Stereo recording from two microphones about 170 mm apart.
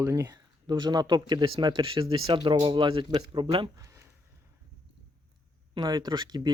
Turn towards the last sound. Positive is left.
turn(degrees=-25)  # may be behind; listen again after turning